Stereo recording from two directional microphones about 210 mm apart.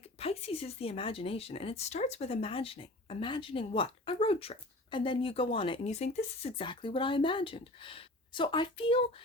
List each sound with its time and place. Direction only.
0.2 s speech: 30° left (ahead or behind)